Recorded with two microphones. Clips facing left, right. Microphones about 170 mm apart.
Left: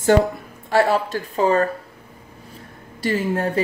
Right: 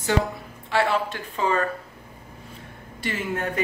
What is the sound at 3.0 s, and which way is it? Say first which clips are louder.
Speech: left 7 dB; 35° left (ahead or behind).